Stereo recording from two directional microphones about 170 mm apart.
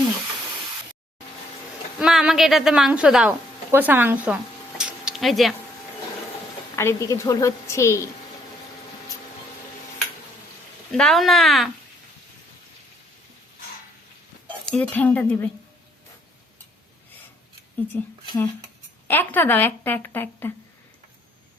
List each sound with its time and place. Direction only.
2.0 s a woman's voice: 5° right (ahead or behind)
4.8 s a sound: 5° right (ahead or behind)
6.7 s speech: 15° left (ahead or behind)
10.9 s a woman's voice: 5° left (ahead or behind)
14.6 s speech: 5° left (ahead or behind)
17.7 s speech: 10° left (ahead or behind)